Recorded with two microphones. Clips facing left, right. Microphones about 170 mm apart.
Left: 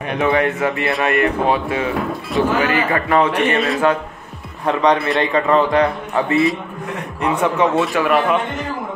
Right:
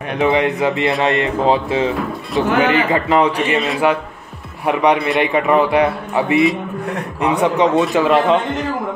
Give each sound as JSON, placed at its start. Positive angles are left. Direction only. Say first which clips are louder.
{"t": 0.2, "sound": "a man's voice", "louder": "right 2 dB", "side_deg": -15}
{"t": 7.4, "sound": "a man's voice", "louder": "right 2 dB", "side_deg": -15}